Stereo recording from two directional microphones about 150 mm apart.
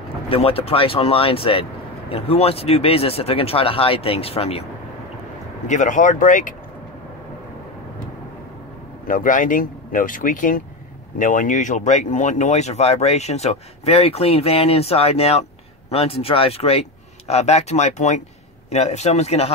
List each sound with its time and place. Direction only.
0.3 s speech: 40° left (ahead or behind)
5.7 s speech: 60° left (ahead or behind)
9.0 s speech: 65° left (ahead or behind); by 19.5 s 45° left (ahead or behind)